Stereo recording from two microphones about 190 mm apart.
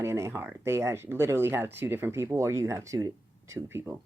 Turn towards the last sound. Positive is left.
turn(degrees=-10)  # may be behind; listen again after turning